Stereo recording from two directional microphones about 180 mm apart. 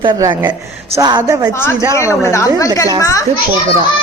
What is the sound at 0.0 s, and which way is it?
Speech, 25° right (ahead or behind).